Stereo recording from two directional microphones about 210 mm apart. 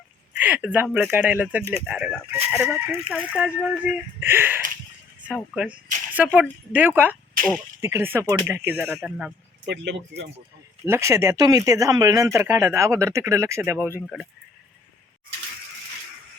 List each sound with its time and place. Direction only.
0.3 s speech: 10° right (ahead or behind)
9.6 s speech: 55° right (ahead or behind)
10.8 s speech: 15° right (ahead or behind)